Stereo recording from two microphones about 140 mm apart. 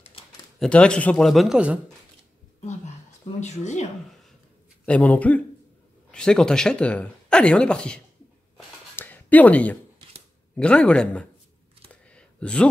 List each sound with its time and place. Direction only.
0.6 s speech: 5° left (ahead or behind)
3.3 s speech: 55° left (ahead or behind)
4.8 s speech: 10° left (ahead or behind)
8.9 s a sound: 15° left (ahead or behind)
10.5 s speech: 10° left (ahead or behind)
11.9 s computer keyboard: 10° left (ahead or behind)